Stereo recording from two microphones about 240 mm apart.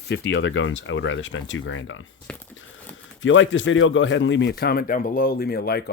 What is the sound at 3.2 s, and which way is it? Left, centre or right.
Speech, left.